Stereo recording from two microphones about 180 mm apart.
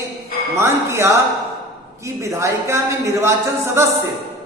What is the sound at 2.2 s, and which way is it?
Speech, 15° right (ahead or behind).